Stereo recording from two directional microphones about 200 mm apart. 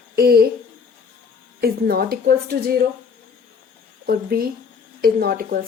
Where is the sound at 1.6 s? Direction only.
50° right (ahead or behind).